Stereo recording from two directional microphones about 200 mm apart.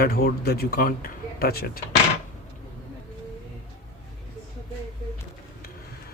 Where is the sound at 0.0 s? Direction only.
50° left (ahead or behind).